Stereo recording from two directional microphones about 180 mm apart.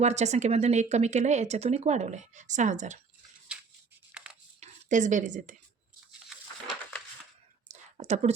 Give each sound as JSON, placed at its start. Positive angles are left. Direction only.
{"t": 0.0, "sound": "speech", "side_deg": -40}
{"t": 4.6, "sound": "speech", "side_deg": -45}
{"t": 7.7, "sound": "a sound", "side_deg": -40}